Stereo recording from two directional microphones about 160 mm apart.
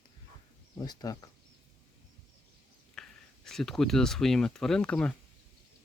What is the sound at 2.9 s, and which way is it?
Speech, 5° left (ahead or behind).